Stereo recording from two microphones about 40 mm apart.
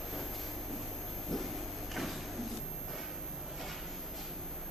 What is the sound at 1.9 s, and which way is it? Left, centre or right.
Sliding door, centre.